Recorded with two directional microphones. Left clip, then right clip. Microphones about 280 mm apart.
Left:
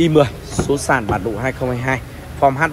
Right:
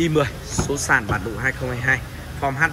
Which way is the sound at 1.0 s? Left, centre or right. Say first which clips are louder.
Left 3 dB; left.